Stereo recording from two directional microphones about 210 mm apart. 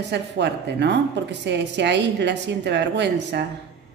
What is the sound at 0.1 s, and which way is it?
A woman's voice, 55° right (ahead or behind).